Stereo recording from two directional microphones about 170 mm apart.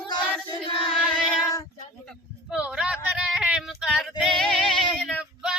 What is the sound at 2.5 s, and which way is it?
Female singing, 5° right (ahead or behind).